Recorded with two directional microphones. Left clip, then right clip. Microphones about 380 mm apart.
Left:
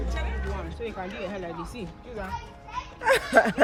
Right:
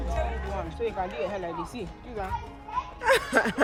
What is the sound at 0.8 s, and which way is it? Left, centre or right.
Speech, right.